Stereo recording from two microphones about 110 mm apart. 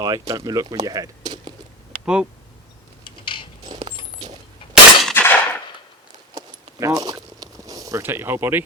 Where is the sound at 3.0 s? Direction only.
50° left (ahead or behind).